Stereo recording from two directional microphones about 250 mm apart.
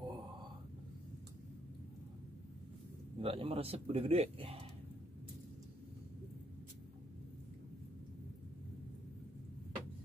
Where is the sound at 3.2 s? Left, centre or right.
Right.